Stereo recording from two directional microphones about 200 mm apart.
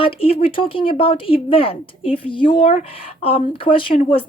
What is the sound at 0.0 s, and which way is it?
Speech, 30° left (ahead or behind).